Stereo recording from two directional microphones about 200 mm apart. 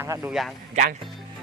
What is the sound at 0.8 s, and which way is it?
Speech, 35° right (ahead or behind).